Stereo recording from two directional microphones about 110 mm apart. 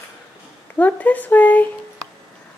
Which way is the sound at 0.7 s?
15° left (ahead or behind).